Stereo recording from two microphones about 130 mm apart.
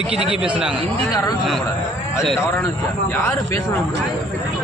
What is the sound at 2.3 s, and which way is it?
A man's voice, 20° left (ahead or behind).